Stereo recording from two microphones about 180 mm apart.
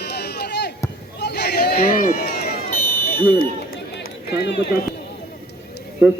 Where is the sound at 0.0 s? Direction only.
65° left (ahead or behind).